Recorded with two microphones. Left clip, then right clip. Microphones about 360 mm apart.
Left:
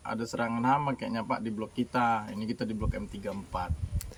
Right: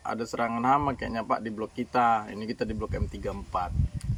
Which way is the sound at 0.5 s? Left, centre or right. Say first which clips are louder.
Right 3 dB; left.